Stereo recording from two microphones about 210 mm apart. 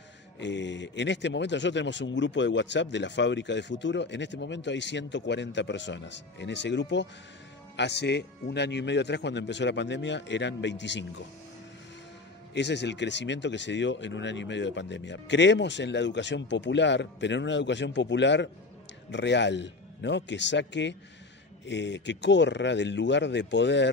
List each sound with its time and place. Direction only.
0.4 s a man's voice: 60° left (ahead or behind)
12.5 s a man's voice: 55° left (ahead or behind)